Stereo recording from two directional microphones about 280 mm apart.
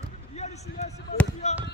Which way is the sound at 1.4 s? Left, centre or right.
Left.